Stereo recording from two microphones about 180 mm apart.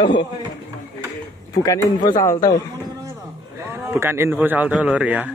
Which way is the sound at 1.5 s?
20° left (ahead or behind).